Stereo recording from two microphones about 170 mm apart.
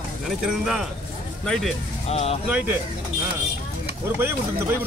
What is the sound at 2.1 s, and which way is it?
Speech, 35° left (ahead or behind).